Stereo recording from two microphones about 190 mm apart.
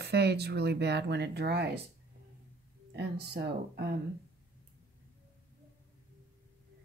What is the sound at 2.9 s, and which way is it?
Speech, 60° right (ahead or behind).